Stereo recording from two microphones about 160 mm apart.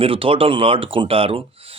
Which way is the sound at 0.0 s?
35° right (ahead or behind).